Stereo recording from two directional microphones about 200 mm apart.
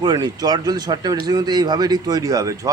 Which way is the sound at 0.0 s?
20° right (ahead or behind).